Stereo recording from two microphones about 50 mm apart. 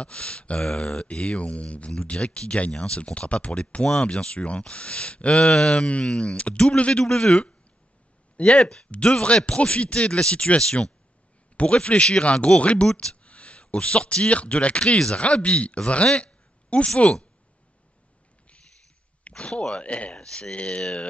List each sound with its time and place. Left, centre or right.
0.0 s speech: left
16.2 s a sound: left
19.2 s speech: left
19.8 s speech: left
20.1 s speech: centre